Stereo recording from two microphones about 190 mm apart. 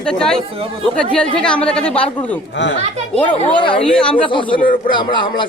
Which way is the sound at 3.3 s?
25° left (ahead or behind).